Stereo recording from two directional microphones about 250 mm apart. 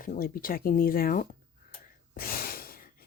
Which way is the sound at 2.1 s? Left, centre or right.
Left.